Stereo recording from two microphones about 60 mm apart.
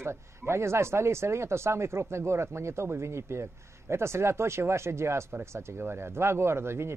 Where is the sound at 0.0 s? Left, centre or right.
Right.